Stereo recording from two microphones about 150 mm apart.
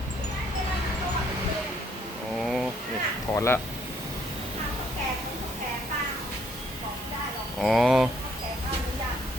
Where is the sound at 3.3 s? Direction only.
20° left (ahead or behind).